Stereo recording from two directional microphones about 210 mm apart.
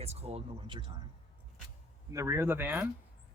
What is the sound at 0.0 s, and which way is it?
Speech, 30° right (ahead or behind).